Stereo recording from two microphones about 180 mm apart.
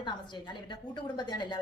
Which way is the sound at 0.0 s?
25° left (ahead or behind).